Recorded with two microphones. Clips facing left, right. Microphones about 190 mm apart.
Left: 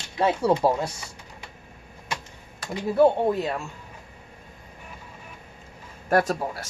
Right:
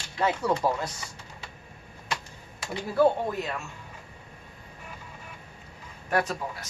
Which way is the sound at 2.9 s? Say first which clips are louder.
Left 4 dB; 25° left (ahead or behind).